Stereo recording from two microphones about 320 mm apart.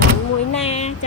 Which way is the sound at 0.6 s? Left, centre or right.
Centre.